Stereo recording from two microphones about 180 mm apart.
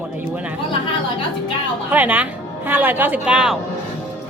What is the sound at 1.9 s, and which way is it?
Speech, 10° right (ahead or behind).